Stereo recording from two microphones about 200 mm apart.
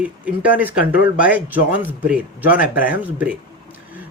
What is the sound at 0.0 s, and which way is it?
Speech, 5° right (ahead or behind).